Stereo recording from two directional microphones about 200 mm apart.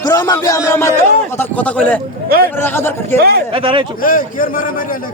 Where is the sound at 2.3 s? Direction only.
50° right (ahead or behind).